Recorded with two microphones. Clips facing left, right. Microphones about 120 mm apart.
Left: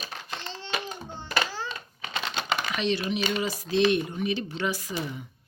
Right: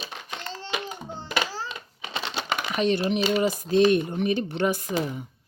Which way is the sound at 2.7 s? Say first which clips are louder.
Right 7 dB; 45° right (ahead or behind).